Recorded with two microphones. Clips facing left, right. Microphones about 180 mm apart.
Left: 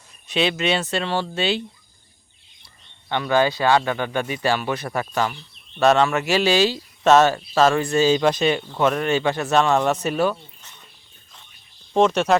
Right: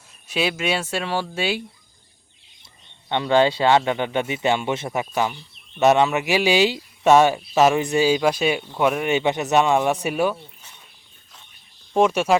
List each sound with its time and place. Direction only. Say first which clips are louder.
0.3 s speech: left 2 dB; 5° right (ahead or behind)
3.1 s a man's voice: right 2 dB; 25° right (ahead or behind)
11.9 s speech: even; 10° right (ahead or behind)